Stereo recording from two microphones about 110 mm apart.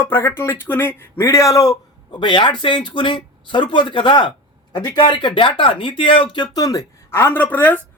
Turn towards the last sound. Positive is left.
turn(degrees=15)  # may be behind; listen again after turning